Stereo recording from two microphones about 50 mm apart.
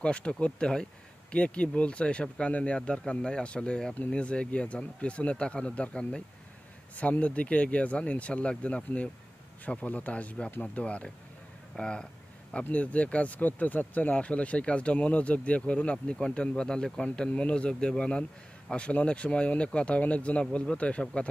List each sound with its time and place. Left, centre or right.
0.0 s speech: left
12.7 s speech: left